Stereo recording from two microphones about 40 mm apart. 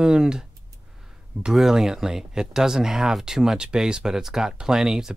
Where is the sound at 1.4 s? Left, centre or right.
Centre.